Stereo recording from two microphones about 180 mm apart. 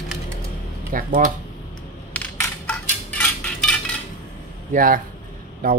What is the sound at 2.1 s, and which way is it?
Crushing, 10° left (ahead or behind).